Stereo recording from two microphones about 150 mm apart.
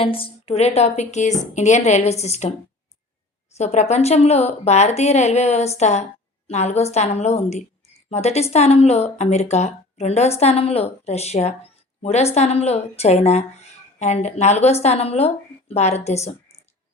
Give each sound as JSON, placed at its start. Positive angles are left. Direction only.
{"t": 0.0, "sound": "speech", "side_deg": 40}
{"t": 3.5, "sound": "speech", "side_deg": 50}